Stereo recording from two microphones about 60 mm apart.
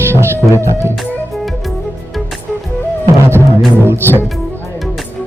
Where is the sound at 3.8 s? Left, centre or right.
Right.